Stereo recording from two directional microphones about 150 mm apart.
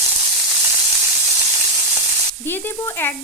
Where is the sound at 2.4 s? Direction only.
15° left (ahead or behind).